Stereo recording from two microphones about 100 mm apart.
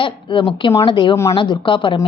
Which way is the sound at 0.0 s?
55° left (ahead or behind).